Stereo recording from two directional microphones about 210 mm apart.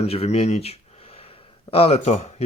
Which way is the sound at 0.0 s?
30° left (ahead or behind).